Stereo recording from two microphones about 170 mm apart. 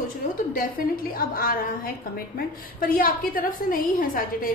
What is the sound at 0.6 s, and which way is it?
A woman's voice, 55° left (ahead or behind).